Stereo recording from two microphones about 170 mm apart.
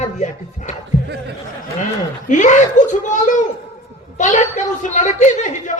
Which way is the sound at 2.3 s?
45° left (ahead or behind).